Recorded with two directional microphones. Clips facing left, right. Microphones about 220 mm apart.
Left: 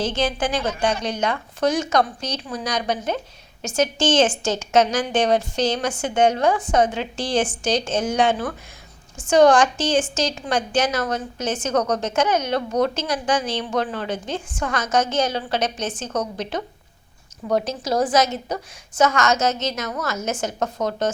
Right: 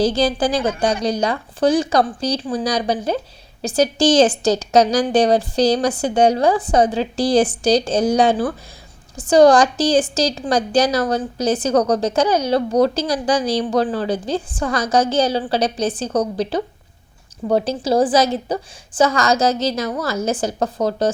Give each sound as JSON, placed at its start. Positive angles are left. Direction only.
{"t": 0.0, "sound": "a woman's voice", "side_deg": -35}